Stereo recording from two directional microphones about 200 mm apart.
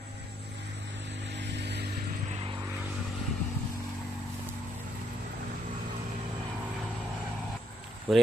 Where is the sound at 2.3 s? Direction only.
30° right (ahead or behind).